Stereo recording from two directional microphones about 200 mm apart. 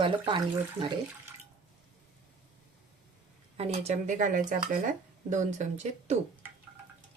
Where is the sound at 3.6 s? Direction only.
30° right (ahead or behind).